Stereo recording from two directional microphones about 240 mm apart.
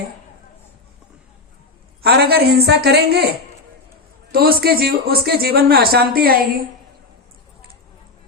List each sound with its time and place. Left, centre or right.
2.0 s a woman's voice: right
4.3 s speech: right